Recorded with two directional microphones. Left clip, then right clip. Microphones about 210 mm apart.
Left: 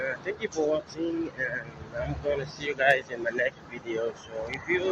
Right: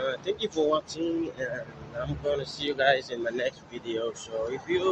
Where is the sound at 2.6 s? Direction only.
15° right (ahead or behind).